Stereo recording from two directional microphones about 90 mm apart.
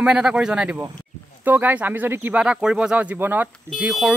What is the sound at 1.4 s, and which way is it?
Speech, 20° right (ahead or behind).